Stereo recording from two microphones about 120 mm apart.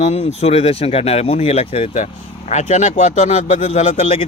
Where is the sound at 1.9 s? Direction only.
75° left (ahead or behind); by 4.2 s 55° left (ahead or behind).